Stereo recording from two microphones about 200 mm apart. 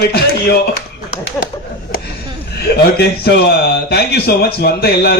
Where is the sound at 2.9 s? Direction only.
55° left (ahead or behind).